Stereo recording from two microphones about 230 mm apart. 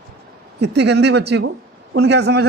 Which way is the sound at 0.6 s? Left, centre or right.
Right.